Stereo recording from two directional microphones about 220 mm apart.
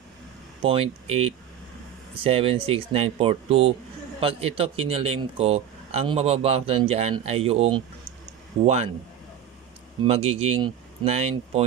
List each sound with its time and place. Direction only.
0.6 s speech: 25° right (ahead or behind)
10.0 s speech: 25° right (ahead or behind)